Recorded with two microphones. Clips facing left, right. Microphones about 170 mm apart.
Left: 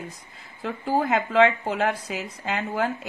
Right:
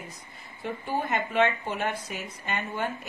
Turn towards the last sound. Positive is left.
turn(degrees=90)